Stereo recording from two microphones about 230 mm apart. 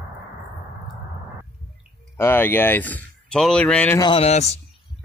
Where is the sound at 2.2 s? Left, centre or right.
Centre.